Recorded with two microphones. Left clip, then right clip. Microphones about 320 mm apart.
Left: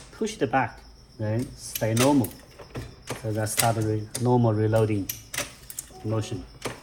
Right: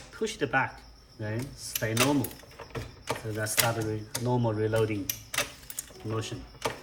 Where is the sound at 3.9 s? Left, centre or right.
Centre.